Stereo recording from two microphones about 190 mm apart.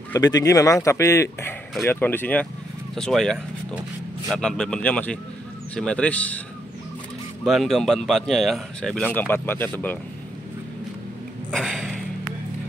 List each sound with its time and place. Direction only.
0.1 s speech: 20° left (ahead or behind)
7.4 s speech: centre (ahead or behind)
11.5 s speech: centre (ahead or behind)